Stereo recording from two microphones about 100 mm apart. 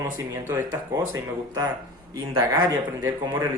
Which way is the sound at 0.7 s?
35° right (ahead or behind).